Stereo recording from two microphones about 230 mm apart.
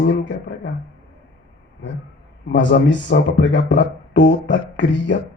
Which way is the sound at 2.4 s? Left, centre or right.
Left.